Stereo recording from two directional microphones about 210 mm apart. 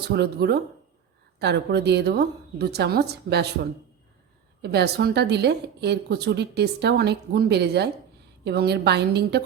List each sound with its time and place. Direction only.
0.1 s a woman's voice: 50° right (ahead or behind)